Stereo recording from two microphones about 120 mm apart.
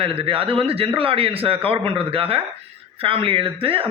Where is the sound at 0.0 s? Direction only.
50° right (ahead or behind).